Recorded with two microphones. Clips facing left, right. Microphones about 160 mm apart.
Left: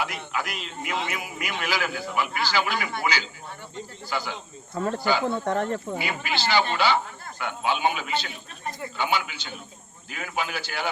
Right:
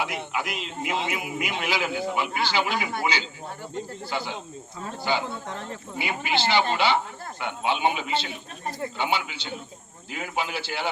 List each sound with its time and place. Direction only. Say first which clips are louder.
0.0 s a man's voice: right 1 dB; 25° right (ahead or behind)
4.7 s speech: left 3 dB; 65° left (ahead or behind)
6.0 s a man's voice: right 2 dB; 25° right (ahead or behind)